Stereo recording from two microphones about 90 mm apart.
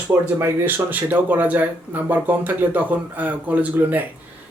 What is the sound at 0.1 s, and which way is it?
Speech, 30° right (ahead or behind).